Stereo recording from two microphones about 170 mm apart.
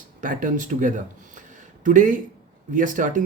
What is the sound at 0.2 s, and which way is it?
Speech, 50° right (ahead or behind).